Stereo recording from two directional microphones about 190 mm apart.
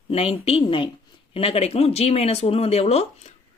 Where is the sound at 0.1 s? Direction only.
30° left (ahead or behind).